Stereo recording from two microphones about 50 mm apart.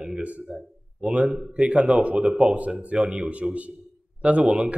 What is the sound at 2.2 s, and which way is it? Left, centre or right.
A man's voice, centre.